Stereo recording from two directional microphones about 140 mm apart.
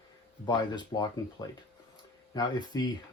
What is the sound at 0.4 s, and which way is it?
Speech, 30° left (ahead or behind).